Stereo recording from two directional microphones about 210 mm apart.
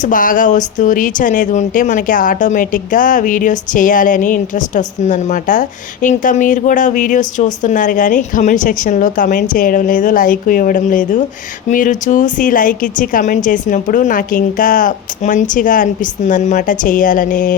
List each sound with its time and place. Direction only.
0.0 s speech: 40° left (ahead or behind)